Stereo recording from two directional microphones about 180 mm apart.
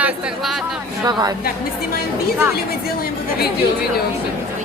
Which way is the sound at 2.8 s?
60° left (ahead or behind).